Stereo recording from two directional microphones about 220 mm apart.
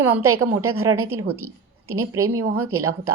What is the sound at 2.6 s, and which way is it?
Speech, 90° right.